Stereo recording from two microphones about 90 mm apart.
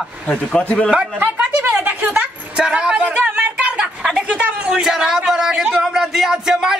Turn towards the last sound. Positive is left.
turn(degrees=-5)  # may be behind; listen again after turning